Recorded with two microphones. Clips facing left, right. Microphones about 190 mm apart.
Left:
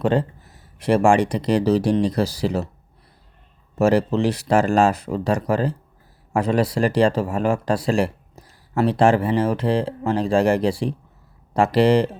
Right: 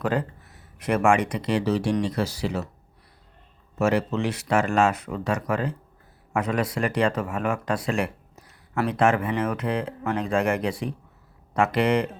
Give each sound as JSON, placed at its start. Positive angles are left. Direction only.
{"t": 0.0, "sound": "speech", "side_deg": 30}
{"t": 3.8, "sound": "speech", "side_deg": 35}